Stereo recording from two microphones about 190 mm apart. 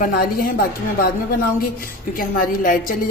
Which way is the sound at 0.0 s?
50° left (ahead or behind).